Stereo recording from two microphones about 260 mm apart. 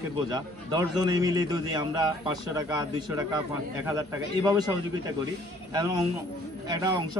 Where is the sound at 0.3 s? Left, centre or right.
Centre.